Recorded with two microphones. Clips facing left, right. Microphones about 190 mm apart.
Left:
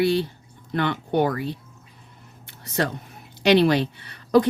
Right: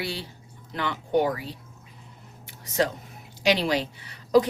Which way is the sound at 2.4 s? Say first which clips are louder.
Even; 65° left (ahead or behind).